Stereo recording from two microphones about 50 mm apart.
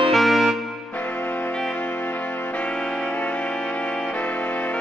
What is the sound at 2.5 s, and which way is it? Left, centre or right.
Music, left.